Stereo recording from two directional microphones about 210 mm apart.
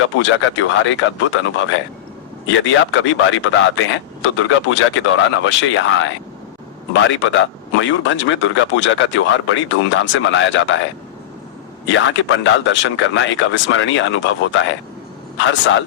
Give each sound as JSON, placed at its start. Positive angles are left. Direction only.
{"t": 0.0, "sound": "speech", "side_deg": 65}
{"t": 11.9, "sound": "speech", "side_deg": 65}